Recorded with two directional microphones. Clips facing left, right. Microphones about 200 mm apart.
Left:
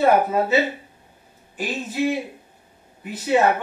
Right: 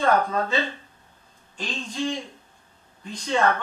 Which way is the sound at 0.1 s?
10° left (ahead or behind).